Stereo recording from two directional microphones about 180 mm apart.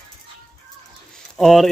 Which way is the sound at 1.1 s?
Centre (ahead or behind).